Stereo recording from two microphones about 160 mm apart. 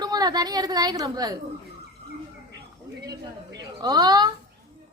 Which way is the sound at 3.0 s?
25° right (ahead or behind).